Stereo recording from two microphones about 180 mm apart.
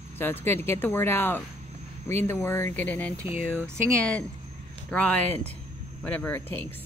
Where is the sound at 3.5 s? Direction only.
15° right (ahead or behind).